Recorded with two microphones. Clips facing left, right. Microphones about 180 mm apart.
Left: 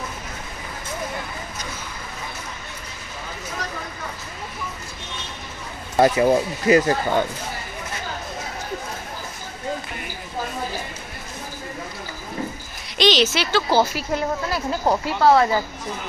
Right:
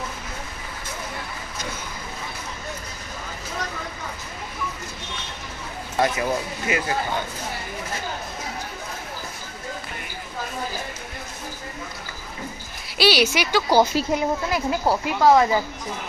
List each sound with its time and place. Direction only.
5.9 s speech: 35° left (ahead or behind)
12.9 s a woman's voice: 10° right (ahead or behind)